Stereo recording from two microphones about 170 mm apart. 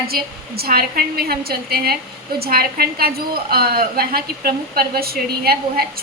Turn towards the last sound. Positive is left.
turn(degrees=-65)  # may be behind; listen again after turning